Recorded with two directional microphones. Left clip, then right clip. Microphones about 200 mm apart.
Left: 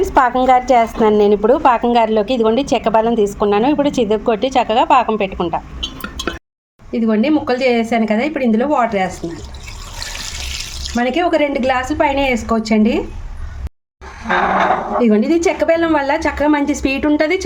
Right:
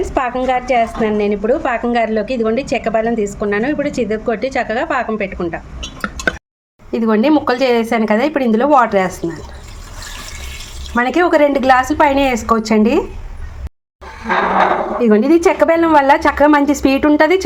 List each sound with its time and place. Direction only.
0.0 s a woman's voice: 5° right (ahead or behind)
6.9 s a woman's voice: 10° right (ahead or behind)
10.9 s a woman's voice: 5° right (ahead or behind)
14.9 s a woman's voice: 5° right (ahead or behind)